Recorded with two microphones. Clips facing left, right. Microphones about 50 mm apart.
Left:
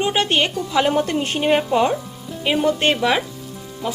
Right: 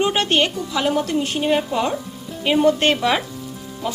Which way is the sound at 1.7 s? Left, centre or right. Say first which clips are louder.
Left 4 dB; centre.